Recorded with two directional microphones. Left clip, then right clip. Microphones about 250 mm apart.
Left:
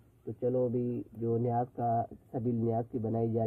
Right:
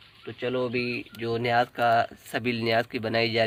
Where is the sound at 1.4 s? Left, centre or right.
Right.